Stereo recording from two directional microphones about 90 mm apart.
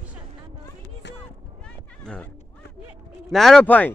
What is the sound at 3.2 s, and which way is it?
Speech, 5° left (ahead or behind).